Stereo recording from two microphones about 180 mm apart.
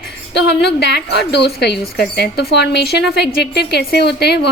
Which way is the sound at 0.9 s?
70° left (ahead or behind).